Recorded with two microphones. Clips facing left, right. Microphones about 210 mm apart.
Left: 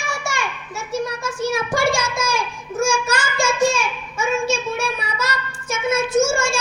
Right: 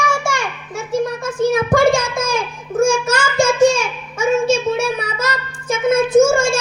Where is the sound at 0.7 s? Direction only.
50° right (ahead or behind).